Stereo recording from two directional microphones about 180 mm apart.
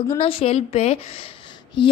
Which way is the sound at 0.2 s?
30° left (ahead or behind).